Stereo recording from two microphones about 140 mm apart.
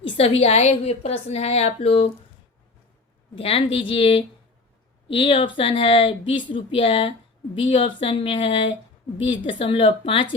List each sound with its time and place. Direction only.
0.2 s a woman's voice: 45° left (ahead or behind)
3.3 s speech: 45° left (ahead or behind)